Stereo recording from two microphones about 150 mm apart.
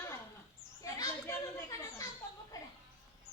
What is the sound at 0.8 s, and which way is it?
Children playing, 25° left (ahead or behind).